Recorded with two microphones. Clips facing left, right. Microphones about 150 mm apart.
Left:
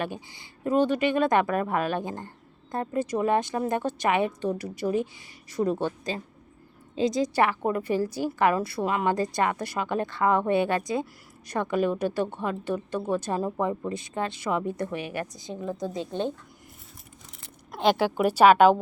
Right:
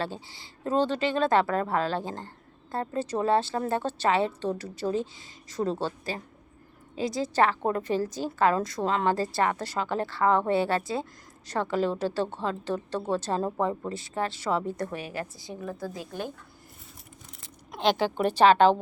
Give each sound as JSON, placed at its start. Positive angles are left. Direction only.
{"t": 0.0, "sound": "a woman's voice", "side_deg": 15}
{"t": 14.8, "sound": "a woman's voice", "side_deg": -35}
{"t": 15.3, "sound": "a woman's voice", "side_deg": 20}
{"t": 17.8, "sound": "a woman's voice", "side_deg": 10}